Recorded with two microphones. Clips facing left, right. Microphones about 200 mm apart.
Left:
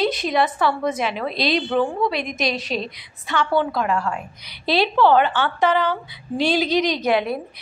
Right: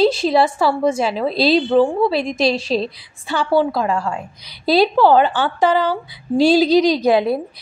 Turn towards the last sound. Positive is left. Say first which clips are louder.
# right 5 dB
turn(degrees=-35)  # may be behind; listen again after turning